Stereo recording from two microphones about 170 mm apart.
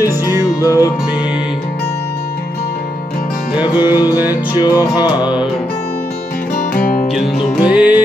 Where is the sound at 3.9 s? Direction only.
25° left (ahead or behind).